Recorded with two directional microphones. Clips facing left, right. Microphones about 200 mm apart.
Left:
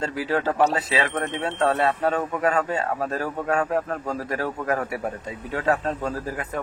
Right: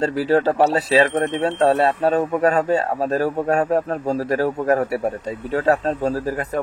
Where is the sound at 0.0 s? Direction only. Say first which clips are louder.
Right 7 dB; 35° right (ahead or behind).